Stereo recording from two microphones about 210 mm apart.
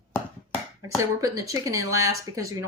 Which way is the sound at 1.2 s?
15° right (ahead or behind).